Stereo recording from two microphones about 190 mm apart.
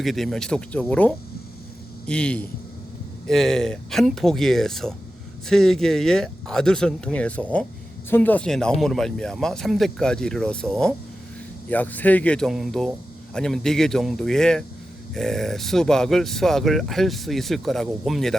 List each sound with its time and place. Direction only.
0.0 s speech: centre (ahead or behind)